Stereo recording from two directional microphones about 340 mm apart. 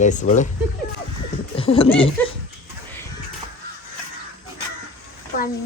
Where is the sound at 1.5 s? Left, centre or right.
Centre.